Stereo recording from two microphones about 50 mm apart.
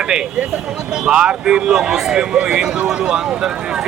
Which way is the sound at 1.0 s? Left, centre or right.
Centre.